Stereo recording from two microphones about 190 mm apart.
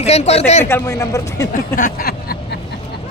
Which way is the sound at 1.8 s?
50° left (ahead or behind).